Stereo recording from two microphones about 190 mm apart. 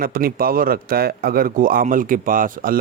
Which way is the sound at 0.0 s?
50° right (ahead or behind).